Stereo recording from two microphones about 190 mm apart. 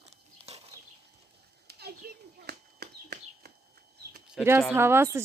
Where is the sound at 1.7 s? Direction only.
60° right (ahead or behind).